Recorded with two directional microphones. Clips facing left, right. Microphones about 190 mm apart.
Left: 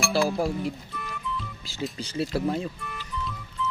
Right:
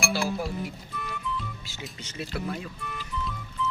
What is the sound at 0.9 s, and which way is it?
Music, centre (ahead or behind).